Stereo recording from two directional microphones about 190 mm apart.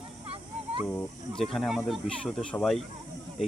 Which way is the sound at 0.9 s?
5° left (ahead or behind).